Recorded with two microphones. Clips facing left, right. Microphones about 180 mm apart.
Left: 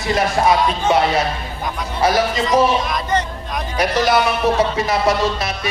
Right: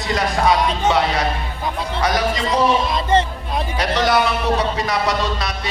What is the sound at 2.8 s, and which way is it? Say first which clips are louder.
Speech: right 3 dB; 25° right (ahead or behind).